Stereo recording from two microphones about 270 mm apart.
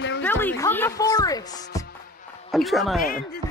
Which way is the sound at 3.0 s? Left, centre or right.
Left.